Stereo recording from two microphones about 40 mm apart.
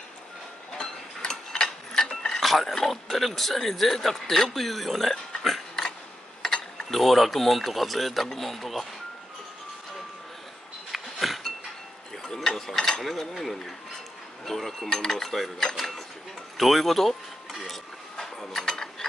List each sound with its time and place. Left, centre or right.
0.7 s tick-tock: centre
2.4 s speech: centre
5.4 s a sound: centre
6.4 s speech: centre
10.9 s a sound: centre
12.4 s mechanisms: centre
13.3 s speech: centre
14.4 s mechanisms: centre
15.7 s speech: centre
18.2 s mechanisms: centre